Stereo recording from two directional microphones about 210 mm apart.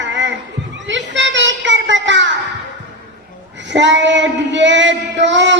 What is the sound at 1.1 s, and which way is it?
Child singing, 60° right (ahead or behind).